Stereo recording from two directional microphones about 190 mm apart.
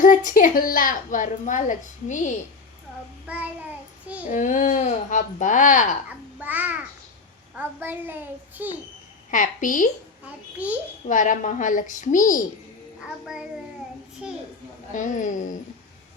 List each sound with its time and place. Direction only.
0.0 s a woman's voice: 45° left (ahead or behind)
3.2 s a child's voice: 5° right (ahead or behind)
4.3 s speech: 40° left (ahead or behind)
6.4 s a child's voice: 10° right (ahead or behind)
9.3 s a woman's voice: 45° left (ahead or behind)
10.6 s a child's voice: 10° right (ahead or behind)
11.0 s a woman's voice: 40° left (ahead or behind)
13.1 s a child's voice: 5° right (ahead or behind)
14.9 s speech: 40° left (ahead or behind)